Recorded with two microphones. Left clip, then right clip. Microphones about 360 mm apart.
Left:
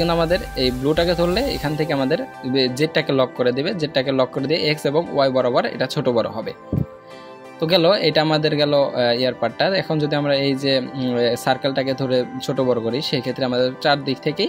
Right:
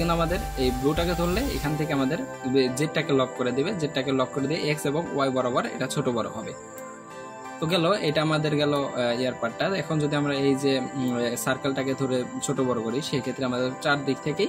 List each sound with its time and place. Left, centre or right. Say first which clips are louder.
0.0 s speech: left 7 dB; left
7.6 s speech: left 8 dB; left